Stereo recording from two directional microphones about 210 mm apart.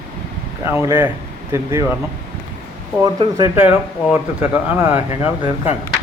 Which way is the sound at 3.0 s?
20° right (ahead or behind).